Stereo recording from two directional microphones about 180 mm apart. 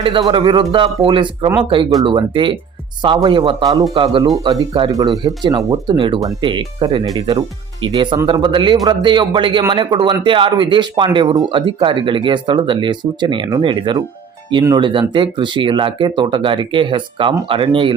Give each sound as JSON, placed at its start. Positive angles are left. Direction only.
{"t": 0.0, "sound": "speech", "side_deg": -30}